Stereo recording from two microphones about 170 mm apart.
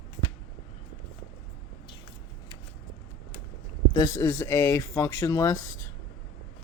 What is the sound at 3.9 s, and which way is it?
Speech, 25° left (ahead or behind).